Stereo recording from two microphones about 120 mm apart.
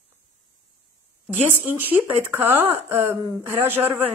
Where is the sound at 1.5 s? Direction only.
15° right (ahead or behind).